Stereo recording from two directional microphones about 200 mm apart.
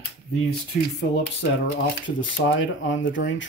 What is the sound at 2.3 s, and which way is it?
Speech, 70° left (ahead or behind).